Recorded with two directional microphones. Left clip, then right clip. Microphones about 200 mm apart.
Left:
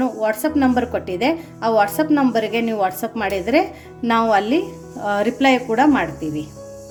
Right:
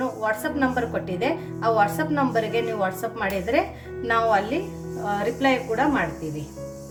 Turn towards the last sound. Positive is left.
turn(degrees=40)  # may be behind; listen again after turning